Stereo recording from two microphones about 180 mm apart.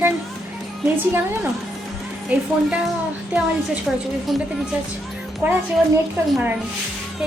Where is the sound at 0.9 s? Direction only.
10° right (ahead or behind).